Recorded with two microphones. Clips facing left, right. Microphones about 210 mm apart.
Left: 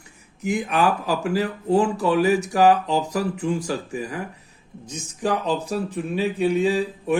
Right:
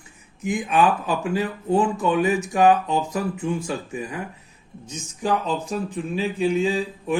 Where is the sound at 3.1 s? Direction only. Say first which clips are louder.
Left 1 dB; 75° left (ahead or behind).